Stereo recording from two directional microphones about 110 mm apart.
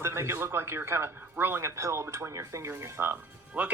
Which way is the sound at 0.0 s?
25° right (ahead or behind).